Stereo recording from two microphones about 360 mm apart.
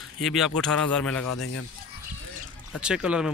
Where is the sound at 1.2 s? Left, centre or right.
Left.